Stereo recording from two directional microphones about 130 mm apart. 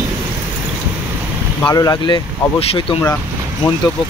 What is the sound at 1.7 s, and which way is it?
Speech, 30° left (ahead or behind).